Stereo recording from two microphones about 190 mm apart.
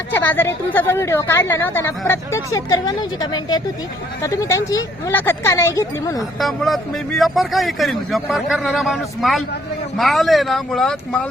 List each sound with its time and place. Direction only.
0.1 s a woman's voice: 10° left (ahead or behind)
6.4 s a man's voice: centre (ahead or behind)